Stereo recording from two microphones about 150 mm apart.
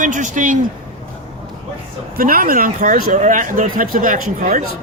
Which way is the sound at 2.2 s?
70° right (ahead or behind).